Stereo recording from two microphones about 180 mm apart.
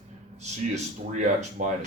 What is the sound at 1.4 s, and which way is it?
Speech, 45° right (ahead or behind).